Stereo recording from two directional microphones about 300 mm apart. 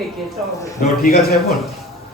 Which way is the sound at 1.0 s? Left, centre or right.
Left.